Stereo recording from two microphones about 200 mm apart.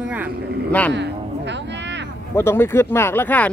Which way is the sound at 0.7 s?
5° left (ahead or behind).